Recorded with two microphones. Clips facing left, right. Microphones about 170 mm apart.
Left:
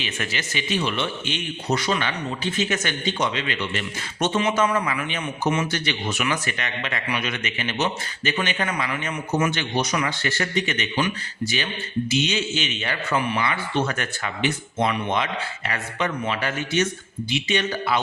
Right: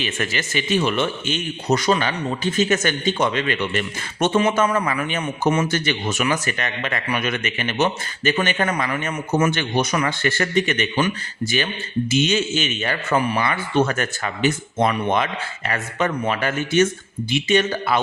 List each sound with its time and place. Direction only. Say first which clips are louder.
0.0 s a man's voice: right 4 dB; 50° right (ahead or behind)